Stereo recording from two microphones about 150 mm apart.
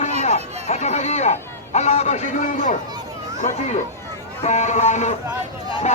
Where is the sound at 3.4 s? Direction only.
55° left (ahead or behind).